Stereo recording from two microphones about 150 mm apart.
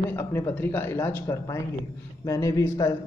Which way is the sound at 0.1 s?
15° left (ahead or behind).